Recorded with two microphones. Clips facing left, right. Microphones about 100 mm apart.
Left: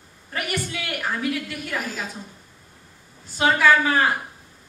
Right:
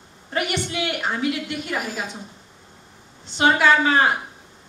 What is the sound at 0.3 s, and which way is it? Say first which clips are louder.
A woman's voice: right 3 dB; 20° right (ahead or behind).